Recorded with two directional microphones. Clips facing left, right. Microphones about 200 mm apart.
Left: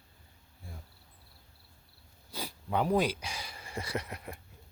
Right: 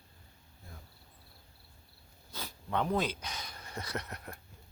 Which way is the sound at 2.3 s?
10° left (ahead or behind).